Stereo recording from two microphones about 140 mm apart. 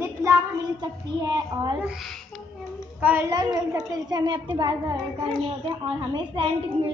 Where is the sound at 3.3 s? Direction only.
25° right (ahead or behind).